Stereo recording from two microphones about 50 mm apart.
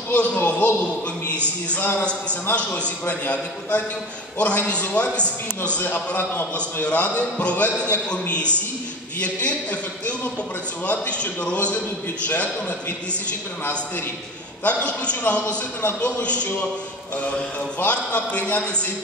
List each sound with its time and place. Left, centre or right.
0.1 s a man's voice: left
1.8 s a man's voice: left
2.5 s a man's voice: left
5.8 s a man's voice: left
14.6 s a man's voice: left
15.4 s a man's voice: left
16.2 s a man's voice: left
17.8 s a man's voice: left